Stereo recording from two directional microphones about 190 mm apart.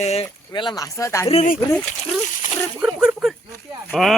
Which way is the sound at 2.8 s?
5° right (ahead or behind).